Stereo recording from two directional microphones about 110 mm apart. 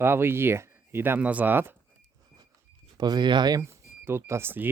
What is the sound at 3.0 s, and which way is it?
Speech, 40° right (ahead or behind).